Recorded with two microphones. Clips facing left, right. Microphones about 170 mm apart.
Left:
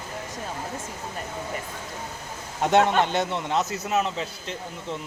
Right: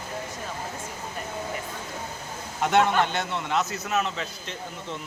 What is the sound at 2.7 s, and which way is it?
Speech, 25° left (ahead or behind).